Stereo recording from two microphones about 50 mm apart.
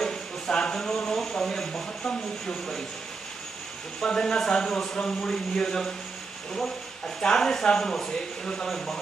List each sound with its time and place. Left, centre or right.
0.0 s a sound: centre
4.0 s speech: centre
7.2 s speech: centre